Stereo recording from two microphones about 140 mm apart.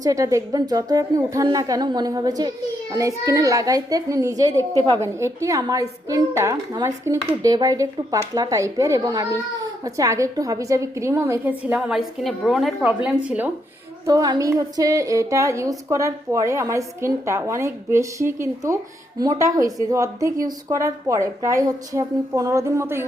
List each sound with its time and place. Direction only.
0.0 s a woman's voice: 25° right (ahead or behind)
14.1 s a woman's voice: 30° right (ahead or behind)